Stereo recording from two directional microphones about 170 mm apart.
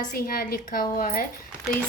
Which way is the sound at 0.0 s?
60° left (ahead or behind).